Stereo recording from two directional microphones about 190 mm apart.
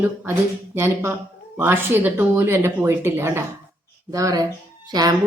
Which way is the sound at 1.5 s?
10° right (ahead or behind).